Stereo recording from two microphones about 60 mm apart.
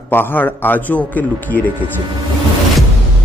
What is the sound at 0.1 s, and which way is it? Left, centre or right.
A man's voice, left.